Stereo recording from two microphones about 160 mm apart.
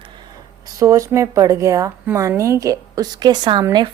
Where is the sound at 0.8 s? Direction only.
20° right (ahead or behind).